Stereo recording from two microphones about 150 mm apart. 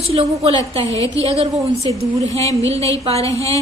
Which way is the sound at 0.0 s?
40° right (ahead or behind).